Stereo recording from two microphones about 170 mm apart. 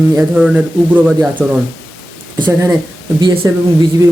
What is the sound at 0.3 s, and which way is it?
Speech, 5° right (ahead or behind).